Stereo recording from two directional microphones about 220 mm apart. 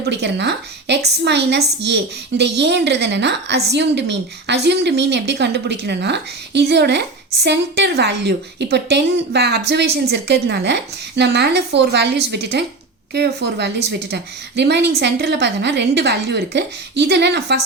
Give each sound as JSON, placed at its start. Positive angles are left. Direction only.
{"t": 0.0, "sound": "a woman's voice", "side_deg": -50}